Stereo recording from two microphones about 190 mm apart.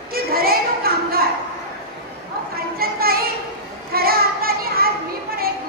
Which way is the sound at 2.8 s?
50° right (ahead or behind).